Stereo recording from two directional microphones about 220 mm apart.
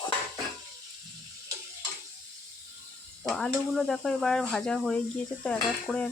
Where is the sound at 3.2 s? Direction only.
5° left (ahead or behind).